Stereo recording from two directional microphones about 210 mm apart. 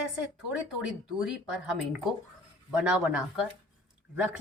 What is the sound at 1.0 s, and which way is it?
A woman's voice, centre (ahead or behind).